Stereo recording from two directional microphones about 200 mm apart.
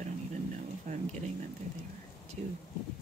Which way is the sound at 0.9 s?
35° right (ahead or behind).